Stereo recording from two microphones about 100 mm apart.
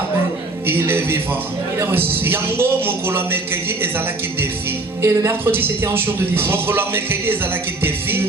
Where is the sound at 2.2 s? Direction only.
20° right (ahead or behind).